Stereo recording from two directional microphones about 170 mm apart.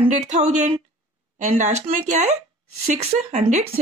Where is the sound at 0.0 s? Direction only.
45° right (ahead or behind).